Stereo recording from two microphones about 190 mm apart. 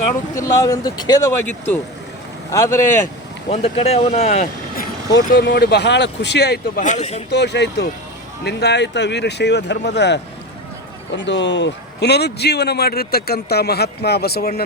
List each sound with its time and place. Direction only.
0.3 s speech: 15° left (ahead or behind)
3.5 s speech: 30° left (ahead or behind)
4.8 s a man's voice: 55° left (ahead or behind)
6.8 s speech: 35° left (ahead or behind)
7.3 s a man's voice: 65° left (ahead or behind)